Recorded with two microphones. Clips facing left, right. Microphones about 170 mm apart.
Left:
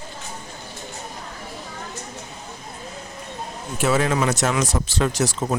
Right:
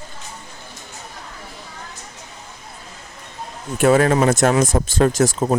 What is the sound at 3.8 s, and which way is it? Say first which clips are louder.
Speech: right 6 dB; 50° right (ahead or behind).